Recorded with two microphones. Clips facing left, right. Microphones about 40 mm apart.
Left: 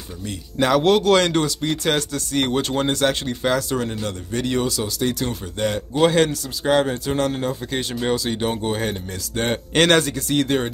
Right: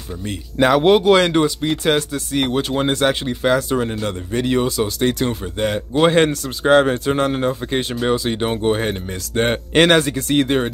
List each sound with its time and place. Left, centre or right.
0.6 s speech: centre
4.6 s speech: right; by 10.1 s centre
10.1 s speech: right